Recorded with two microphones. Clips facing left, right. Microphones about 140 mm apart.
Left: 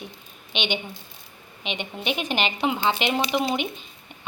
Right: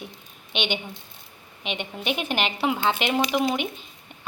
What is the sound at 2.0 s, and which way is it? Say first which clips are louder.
A woman's voice: even; 5° right (ahead or behind).